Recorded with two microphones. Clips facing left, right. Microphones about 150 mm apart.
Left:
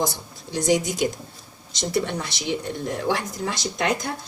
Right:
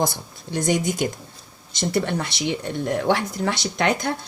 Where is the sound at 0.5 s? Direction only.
55° right (ahead or behind).